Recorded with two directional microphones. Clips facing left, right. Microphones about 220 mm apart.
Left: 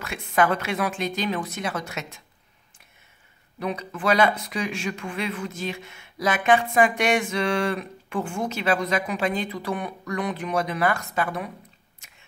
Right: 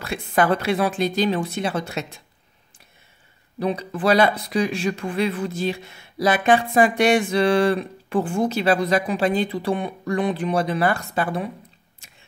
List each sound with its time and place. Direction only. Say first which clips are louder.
0.0 s speech: right 2 dB; 35° right (ahead or behind)
3.5 s speech: right 5 dB; 35° right (ahead or behind)
12.0 s a sound: right 3 dB; 30° right (ahead or behind)